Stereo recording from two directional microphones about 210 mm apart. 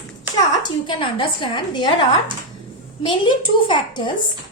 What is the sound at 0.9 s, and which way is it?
A woman's voice, 25° left (ahead or behind).